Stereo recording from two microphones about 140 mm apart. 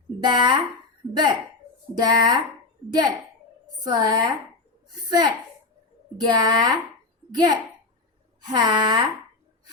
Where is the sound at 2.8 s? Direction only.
40° right (ahead or behind).